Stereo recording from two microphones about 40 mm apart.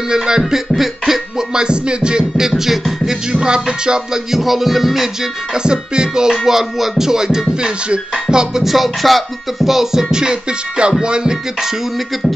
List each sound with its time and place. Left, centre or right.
0.4 s music: centre
1.5 s music: right
3.3 s music: right
4.3 s music: centre
5.5 s music: centre
8.6 s music: centre
10.8 s music: right